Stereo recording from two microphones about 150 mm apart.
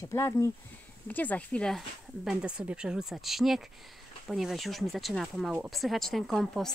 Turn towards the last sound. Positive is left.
turn(degrees=5)  # may be behind; listen again after turning